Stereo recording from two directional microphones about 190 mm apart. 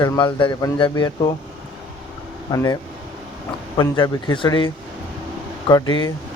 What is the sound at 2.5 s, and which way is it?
Speech, 20° left (ahead or behind).